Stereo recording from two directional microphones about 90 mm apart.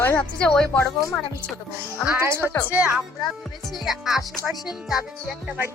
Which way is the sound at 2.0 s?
25° right (ahead or behind).